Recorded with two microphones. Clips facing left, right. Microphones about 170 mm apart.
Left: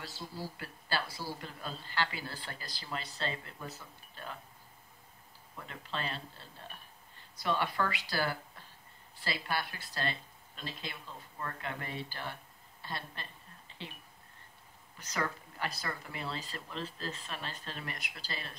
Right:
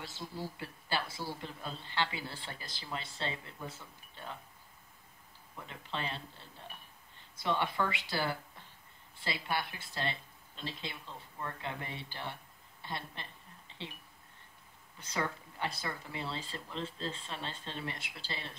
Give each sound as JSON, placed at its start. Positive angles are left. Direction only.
{"t": 0.0, "sound": "a man's voice", "side_deg": -25}
{"t": 5.6, "sound": "a man's voice", "side_deg": -20}
{"t": 12.8, "sound": "a sound", "side_deg": -20}
{"t": 15.0, "sound": "a man's voice", "side_deg": -25}